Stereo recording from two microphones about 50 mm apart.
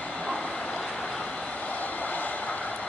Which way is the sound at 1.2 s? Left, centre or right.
Left.